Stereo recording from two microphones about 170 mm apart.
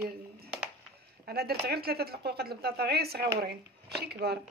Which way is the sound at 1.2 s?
70° right (ahead or behind).